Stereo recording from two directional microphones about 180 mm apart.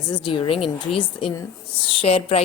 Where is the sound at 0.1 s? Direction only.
25° left (ahead or behind).